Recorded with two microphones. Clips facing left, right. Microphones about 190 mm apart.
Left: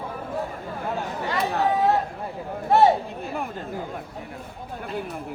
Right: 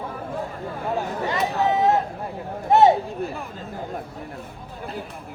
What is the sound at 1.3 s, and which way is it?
Chatter, 20° right (ahead or behind).